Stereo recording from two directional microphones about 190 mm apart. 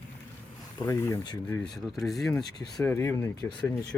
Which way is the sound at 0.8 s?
15° left (ahead or behind).